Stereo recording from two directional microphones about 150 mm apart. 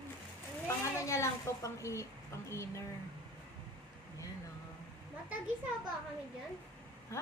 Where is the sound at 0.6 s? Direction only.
20° left (ahead or behind).